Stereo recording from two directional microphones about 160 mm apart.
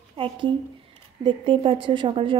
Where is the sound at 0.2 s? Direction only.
35° right (ahead or behind).